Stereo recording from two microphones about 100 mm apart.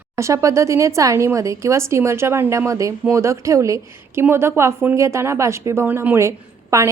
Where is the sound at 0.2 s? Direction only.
30° right (ahead or behind).